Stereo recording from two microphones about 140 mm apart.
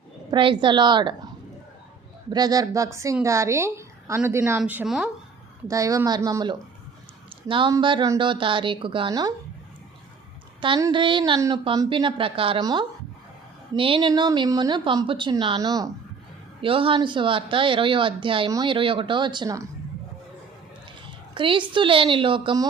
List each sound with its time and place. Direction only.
0.3 s speech: 35° right (ahead or behind)
2.3 s a woman's voice: 30° right (ahead or behind); by 5.1 s 10° right (ahead or behind)
5.6 s a woman's voice: 25° right (ahead or behind)
10.9 s speech: 35° right (ahead or behind)
11.3 s a woman's voice: 25° right (ahead or behind)
11.9 s speech: 35° right (ahead or behind)
13.7 s speech: 40° right (ahead or behind)
16.6 s speech: 40° right (ahead or behind)
21.3 s speech: 35° right (ahead or behind)